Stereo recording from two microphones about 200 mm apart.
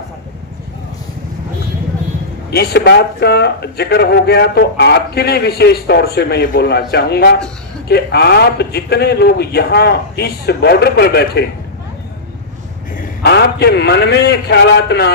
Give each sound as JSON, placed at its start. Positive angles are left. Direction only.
{"t": 2.5, "sound": "speech", "side_deg": 50}
{"t": 13.2, "sound": "a man's voice", "side_deg": 55}